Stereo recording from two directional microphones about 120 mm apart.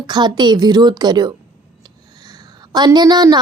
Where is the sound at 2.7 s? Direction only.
35° right (ahead or behind).